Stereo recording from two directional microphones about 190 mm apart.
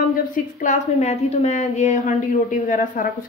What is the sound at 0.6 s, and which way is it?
A woman's voice, 40° left (ahead or behind).